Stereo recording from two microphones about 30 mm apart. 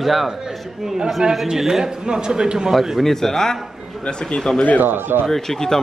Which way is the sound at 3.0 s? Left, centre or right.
Centre.